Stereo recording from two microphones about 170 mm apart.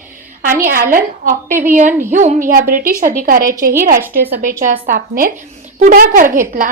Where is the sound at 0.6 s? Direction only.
55° right (ahead or behind).